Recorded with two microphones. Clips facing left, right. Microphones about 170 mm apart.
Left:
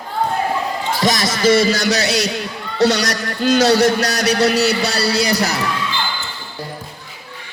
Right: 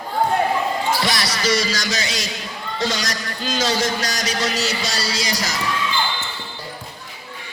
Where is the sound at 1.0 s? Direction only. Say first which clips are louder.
Left 7 dB; 45° left (ahead or behind); by 5.5 s 60° left (ahead or behind).